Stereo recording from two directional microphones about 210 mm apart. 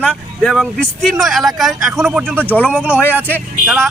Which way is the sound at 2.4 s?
10° left (ahead or behind).